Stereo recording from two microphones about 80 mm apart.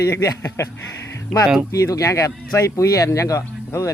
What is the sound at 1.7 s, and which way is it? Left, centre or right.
Speech, left.